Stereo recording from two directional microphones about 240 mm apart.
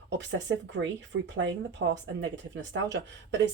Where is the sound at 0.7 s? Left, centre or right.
Right.